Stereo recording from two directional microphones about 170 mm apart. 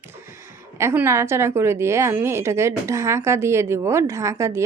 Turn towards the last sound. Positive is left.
turn(degrees=-15)  # may be behind; listen again after turning